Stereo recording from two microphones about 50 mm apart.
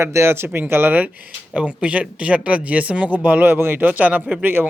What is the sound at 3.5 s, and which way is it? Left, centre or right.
Speech, right.